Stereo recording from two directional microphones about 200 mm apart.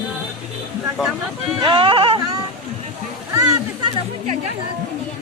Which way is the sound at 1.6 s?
25° right (ahead or behind).